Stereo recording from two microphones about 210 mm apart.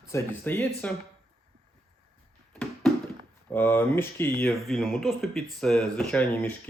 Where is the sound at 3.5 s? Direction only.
10° left (ahead or behind).